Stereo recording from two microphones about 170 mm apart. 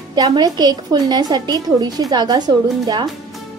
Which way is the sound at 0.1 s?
25° right (ahead or behind).